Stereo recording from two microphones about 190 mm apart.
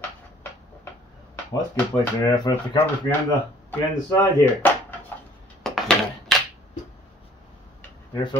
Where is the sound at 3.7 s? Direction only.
10° left (ahead or behind).